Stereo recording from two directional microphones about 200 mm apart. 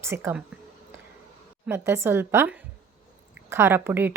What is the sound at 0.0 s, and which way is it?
Speech, 15° right (ahead or behind).